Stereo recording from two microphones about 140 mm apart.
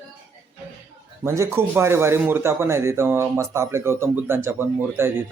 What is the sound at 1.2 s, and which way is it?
A man's voice, 20° right (ahead or behind).